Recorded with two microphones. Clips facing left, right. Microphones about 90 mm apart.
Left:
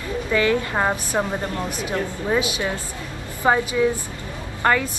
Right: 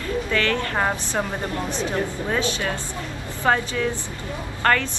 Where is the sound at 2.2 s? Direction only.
10° left (ahead or behind).